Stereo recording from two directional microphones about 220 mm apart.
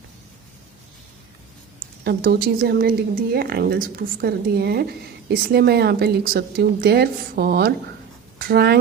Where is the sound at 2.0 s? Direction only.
45° right (ahead or behind).